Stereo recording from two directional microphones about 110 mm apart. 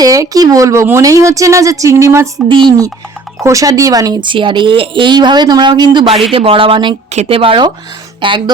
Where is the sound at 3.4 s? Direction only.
30° right (ahead or behind).